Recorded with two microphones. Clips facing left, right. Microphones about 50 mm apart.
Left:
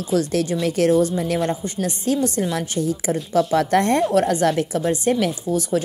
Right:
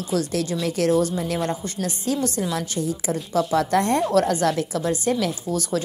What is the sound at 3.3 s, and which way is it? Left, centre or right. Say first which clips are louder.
Speech: left 3 dB; left.